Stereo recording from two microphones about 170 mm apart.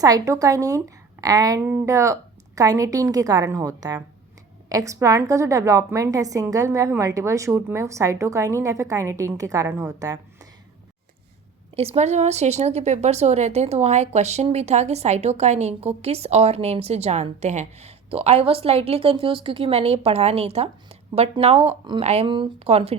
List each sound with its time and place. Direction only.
0.0 s a woman's voice: 20° right (ahead or behind)
11.8 s speech: 40° right (ahead or behind)